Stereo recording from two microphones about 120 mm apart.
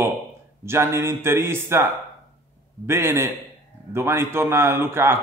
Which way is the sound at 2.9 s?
20° right (ahead or behind).